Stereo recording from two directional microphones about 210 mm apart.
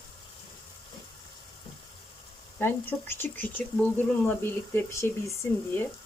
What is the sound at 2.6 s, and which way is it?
Speech, 10° left (ahead or behind).